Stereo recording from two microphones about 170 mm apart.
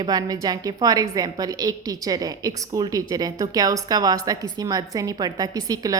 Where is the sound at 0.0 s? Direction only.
20° right (ahead or behind).